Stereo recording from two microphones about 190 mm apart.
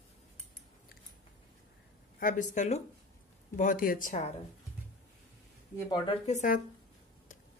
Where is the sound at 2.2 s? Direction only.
45° left (ahead or behind).